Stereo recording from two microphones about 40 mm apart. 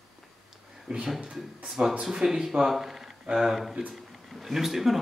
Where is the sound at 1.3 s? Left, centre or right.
Centre.